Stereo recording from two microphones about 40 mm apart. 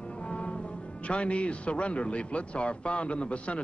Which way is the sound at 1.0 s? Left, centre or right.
Left.